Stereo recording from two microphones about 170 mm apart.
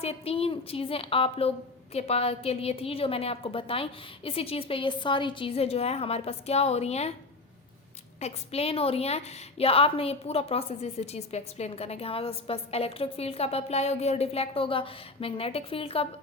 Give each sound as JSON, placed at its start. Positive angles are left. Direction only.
{"t": 0.0, "sound": "a woman's voice", "side_deg": 35}
{"t": 8.2, "sound": "a woman's voice", "side_deg": 35}